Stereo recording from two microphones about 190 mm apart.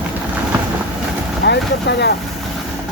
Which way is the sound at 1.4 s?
60° left (ahead or behind).